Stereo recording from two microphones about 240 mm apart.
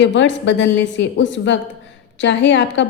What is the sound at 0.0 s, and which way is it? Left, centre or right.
A woman's voice, left.